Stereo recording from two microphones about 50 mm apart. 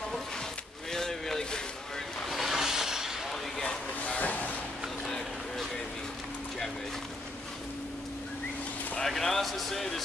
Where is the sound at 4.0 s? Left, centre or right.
Left.